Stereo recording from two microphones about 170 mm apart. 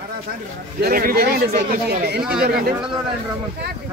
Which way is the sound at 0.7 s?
60° right (ahead or behind).